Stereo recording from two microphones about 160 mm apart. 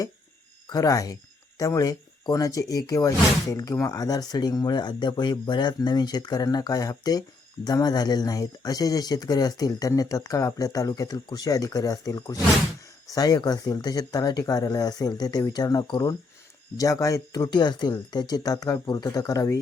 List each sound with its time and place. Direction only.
0.7 s speech: 20° left (ahead or behind)